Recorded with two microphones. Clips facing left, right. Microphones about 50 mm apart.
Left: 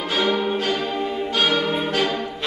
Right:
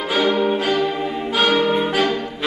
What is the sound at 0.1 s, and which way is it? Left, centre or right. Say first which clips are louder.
Music: right 4 dB; centre.